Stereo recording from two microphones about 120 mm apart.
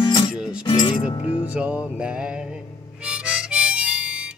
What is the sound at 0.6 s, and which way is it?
Speech, 45° left (ahead or behind).